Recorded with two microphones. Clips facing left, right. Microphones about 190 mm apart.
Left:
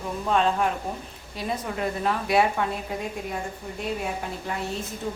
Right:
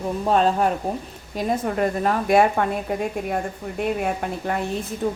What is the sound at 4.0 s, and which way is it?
A woman's voice, 60° right (ahead or behind).